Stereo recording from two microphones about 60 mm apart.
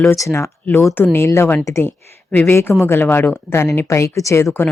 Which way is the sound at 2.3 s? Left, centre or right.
Left.